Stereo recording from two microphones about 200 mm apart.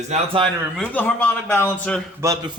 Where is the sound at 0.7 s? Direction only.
5° left (ahead or behind).